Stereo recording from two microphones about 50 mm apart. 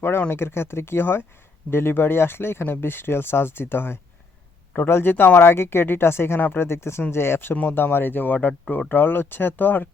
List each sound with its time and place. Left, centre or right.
0.3 s speech: left
7.5 s speech: left